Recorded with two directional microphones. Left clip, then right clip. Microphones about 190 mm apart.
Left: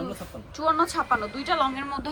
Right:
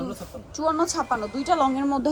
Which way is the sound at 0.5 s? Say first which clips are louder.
Even; 20° right (ahead or behind).